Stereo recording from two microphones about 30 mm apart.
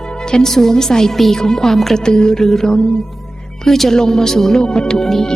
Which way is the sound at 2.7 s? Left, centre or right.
Left.